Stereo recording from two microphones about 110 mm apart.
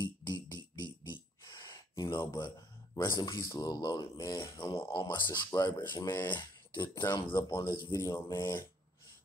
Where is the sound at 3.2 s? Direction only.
30° left (ahead or behind).